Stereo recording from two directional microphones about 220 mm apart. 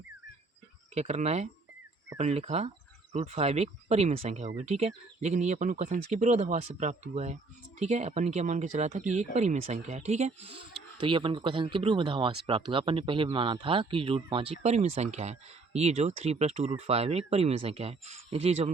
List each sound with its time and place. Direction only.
0.9 s speech: 30° right (ahead or behind)